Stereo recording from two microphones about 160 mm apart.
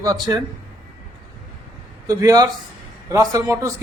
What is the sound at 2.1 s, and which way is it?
A man's voice, 20° right (ahead or behind).